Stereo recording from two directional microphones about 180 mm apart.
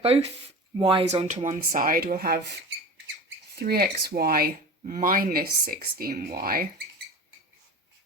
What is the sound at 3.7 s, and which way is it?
Speech, 60° right (ahead or behind).